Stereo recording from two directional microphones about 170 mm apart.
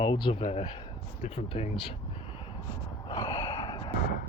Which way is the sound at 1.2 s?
40° left (ahead or behind).